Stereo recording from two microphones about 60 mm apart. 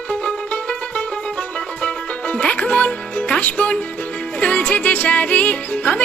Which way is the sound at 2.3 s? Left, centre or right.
Left.